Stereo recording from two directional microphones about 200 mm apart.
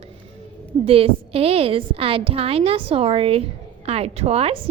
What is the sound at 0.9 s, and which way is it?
A woman's voice, 30° right (ahead or behind).